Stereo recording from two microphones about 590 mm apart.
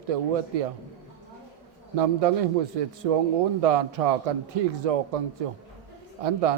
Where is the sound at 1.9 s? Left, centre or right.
Right.